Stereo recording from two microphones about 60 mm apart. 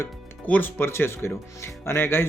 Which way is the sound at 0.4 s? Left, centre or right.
Left.